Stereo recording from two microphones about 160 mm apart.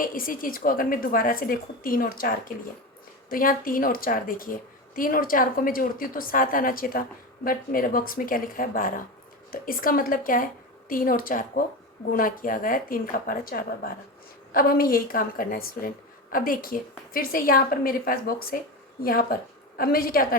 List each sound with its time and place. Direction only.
0.0 s a woman's voice: 60° left (ahead or behind)